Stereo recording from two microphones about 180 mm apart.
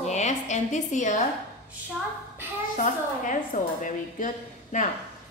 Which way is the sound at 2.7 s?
45° left (ahead or behind).